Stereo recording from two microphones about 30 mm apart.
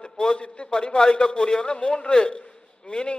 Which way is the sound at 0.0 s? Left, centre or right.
Left.